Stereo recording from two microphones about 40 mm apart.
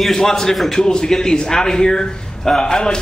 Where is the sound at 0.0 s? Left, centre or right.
Centre.